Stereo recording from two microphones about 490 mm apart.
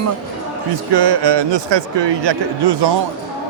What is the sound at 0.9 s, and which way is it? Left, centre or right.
A man's voice, right.